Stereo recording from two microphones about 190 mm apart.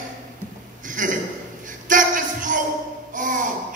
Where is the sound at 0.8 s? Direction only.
45° right (ahead or behind).